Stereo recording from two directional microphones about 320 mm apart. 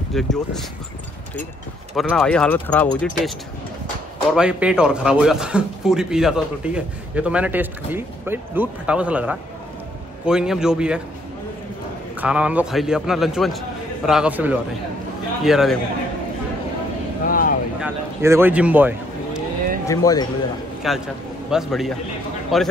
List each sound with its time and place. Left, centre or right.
0.1 s speech: centre
2.0 s speech: centre
4.4 s speech: centre
12.2 s speech: centre
17.3 s vehicle: left
17.7 s a sound: centre
19.9 s speech: centre
20.8 s speech: centre